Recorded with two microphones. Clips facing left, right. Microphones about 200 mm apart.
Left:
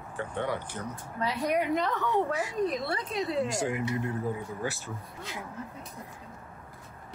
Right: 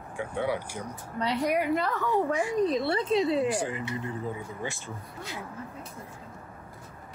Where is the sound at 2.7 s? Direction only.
25° right (ahead or behind).